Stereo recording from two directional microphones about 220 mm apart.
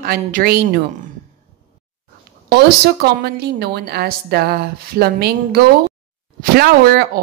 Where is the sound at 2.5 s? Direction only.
45° right (ahead or behind).